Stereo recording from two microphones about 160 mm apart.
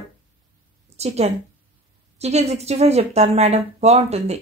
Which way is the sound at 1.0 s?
40° right (ahead or behind).